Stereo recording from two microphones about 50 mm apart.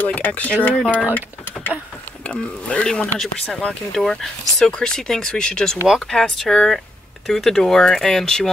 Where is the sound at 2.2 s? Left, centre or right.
Left.